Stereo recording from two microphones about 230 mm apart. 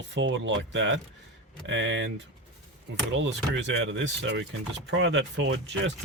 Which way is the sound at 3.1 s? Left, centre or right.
Right.